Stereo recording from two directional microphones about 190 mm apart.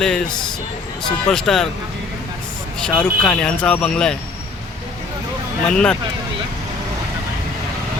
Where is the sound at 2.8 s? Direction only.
5° left (ahead or behind).